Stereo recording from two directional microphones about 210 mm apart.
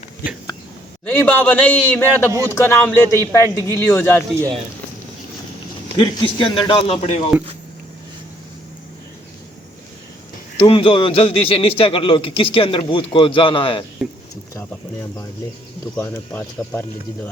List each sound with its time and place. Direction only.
1.0 s speech: 10° left (ahead or behind)
6.0 s a man's voice: 25° left (ahead or behind)
10.6 s a man's voice: 25° left (ahead or behind)
16.0 s speech: 10° left (ahead or behind)